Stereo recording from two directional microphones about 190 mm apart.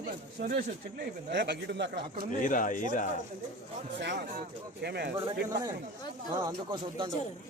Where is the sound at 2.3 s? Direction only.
45° left (ahead or behind).